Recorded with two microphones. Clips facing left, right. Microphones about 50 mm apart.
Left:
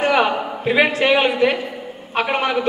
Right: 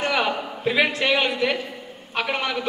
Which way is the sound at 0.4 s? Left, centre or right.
Left.